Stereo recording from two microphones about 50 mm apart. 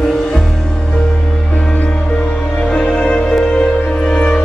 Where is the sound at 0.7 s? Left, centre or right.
Centre.